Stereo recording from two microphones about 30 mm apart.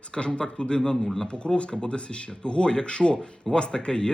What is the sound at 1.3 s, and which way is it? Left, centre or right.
A man's voice, left.